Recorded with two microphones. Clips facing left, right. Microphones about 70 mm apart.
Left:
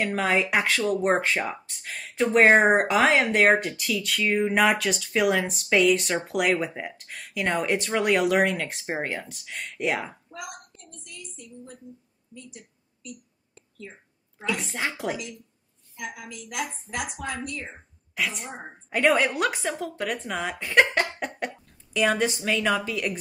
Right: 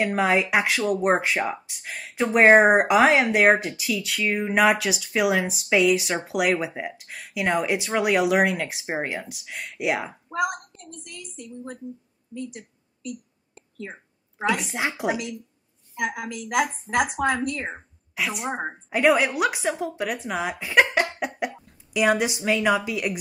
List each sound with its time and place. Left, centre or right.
0.0 s speech: centre
10.3 s a sound: right
14.7 s a woman's voice: centre
16.0 s a woman's voice: right
18.1 s a woman's voice: centre
18.5 s speech: right
18.9 s a woman's voice: centre